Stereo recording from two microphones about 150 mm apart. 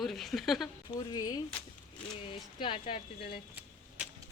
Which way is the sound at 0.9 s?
25° left (ahead or behind).